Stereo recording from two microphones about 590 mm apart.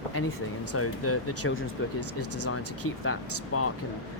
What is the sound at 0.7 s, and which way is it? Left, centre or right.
Speech, left.